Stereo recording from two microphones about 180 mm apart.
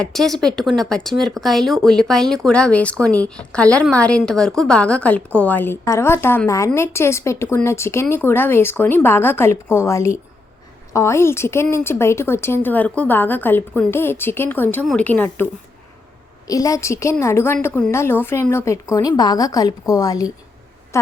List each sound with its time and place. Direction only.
0.0 s speech: centre (ahead or behind)
16.5 s speech: 20° left (ahead or behind)